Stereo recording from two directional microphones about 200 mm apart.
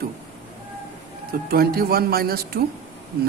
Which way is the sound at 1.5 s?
50° right (ahead or behind).